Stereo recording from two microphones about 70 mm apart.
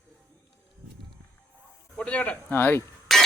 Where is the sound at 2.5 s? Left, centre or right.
Left.